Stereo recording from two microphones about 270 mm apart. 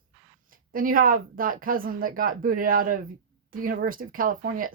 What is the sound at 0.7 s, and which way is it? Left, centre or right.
Speech, right.